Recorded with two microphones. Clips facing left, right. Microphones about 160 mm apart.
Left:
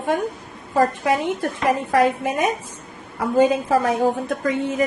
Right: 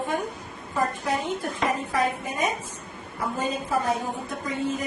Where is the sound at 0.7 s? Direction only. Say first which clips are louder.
Left 7 dB; 90° left.